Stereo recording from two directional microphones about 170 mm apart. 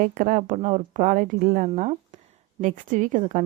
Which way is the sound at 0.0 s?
55° right (ahead or behind).